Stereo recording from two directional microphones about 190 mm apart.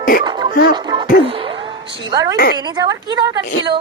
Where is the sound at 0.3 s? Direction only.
25° right (ahead or behind).